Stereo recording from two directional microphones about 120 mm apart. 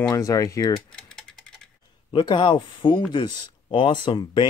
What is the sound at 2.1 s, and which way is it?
Speech, 45° left (ahead or behind).